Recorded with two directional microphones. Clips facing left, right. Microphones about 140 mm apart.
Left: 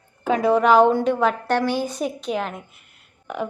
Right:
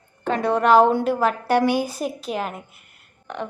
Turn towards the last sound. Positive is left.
turn(degrees=10)  # may be behind; listen again after turning